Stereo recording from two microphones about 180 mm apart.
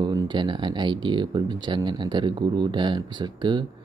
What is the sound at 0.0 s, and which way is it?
Speech, 25° right (ahead or behind).